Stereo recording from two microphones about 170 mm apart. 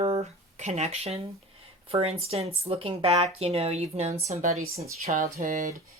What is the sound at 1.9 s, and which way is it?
Speech, 35° right (ahead or behind).